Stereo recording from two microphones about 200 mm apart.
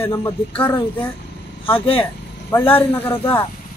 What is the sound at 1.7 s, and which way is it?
Speech, 30° left (ahead or behind).